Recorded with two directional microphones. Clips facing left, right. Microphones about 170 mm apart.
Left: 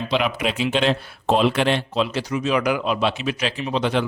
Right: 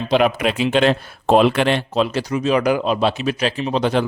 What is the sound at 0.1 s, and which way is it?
Speech, 45° right (ahead or behind).